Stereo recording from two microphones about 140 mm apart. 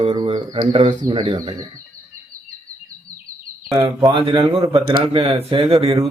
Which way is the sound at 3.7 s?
30° right (ahead or behind).